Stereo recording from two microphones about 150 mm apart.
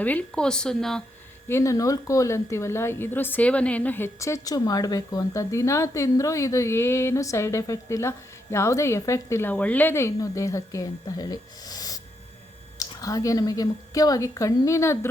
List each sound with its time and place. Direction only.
0.0 s speech: 10° left (ahead or behind)
1.5 s a woman's voice: 20° left (ahead or behind)